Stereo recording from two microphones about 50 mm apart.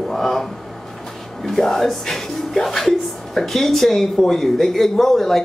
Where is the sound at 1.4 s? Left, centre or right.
Centre.